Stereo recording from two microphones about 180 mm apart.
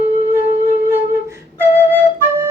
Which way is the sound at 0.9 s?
10° right (ahead or behind).